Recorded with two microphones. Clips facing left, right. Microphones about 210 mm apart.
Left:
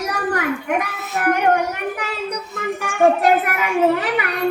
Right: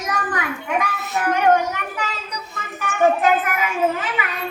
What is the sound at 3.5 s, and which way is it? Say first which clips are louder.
A child's voice: left 4 dB; 70° left (ahead or behind).